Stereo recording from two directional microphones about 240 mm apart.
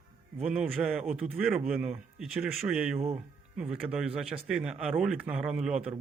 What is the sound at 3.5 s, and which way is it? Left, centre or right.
Speech, centre.